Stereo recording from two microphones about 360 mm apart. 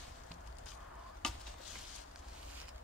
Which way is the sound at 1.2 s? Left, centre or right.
Centre.